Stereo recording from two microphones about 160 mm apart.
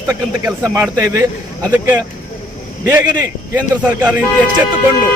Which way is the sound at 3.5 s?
10° right (ahead or behind).